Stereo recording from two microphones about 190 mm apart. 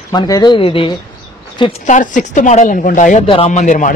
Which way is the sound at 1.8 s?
40° left (ahead or behind).